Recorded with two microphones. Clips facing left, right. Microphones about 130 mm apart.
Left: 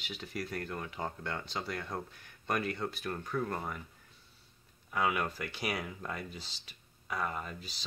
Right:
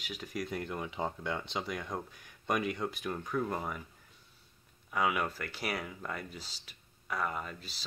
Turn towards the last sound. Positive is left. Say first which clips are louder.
# even
turn(degrees=0)  # may be behind; listen again after turning